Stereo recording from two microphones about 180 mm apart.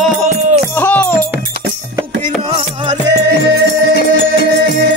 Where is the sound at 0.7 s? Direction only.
10° left (ahead or behind).